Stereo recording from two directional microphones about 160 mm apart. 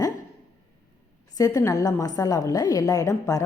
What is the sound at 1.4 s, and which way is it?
A woman's voice, 20° left (ahead or behind).